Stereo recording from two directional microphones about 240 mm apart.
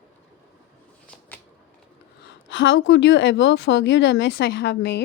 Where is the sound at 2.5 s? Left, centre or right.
Left.